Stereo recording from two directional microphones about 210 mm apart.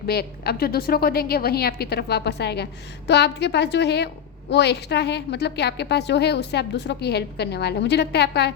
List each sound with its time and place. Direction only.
0.1 s a woman's voice: 50° left (ahead or behind)